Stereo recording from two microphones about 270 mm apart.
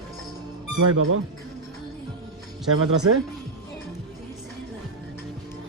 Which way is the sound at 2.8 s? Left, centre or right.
Right.